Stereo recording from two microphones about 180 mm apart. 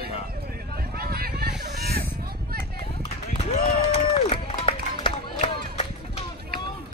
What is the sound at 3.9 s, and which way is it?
Run, 30° left (ahead or behind).